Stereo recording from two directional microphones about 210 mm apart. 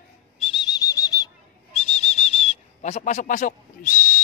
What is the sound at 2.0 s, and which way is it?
Whistle, 30° left (ahead or behind).